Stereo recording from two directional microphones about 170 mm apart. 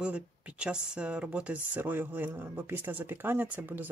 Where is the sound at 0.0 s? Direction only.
5° right (ahead or behind).